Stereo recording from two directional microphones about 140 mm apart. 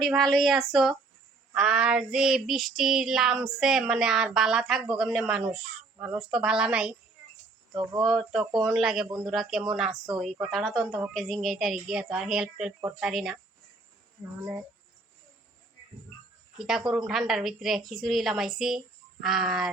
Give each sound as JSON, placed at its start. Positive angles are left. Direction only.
{"t": 0.0, "sound": "child singing", "side_deg": 0}
{"t": 5.5, "sound": "a woman's voice", "side_deg": -5}
{"t": 7.7, "sound": "speech", "side_deg": -25}
{"t": 8.0, "sound": "child singing", "side_deg": 0}
{"t": 16.6, "sound": "child singing", "side_deg": -5}